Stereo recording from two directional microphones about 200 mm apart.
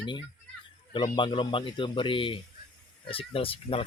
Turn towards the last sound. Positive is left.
turn(degrees=30)  # may be behind; listen again after turning